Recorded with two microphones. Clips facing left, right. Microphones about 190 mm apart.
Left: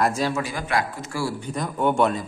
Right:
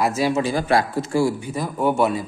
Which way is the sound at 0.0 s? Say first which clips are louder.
Right 2 dB; 5° right (ahead or behind).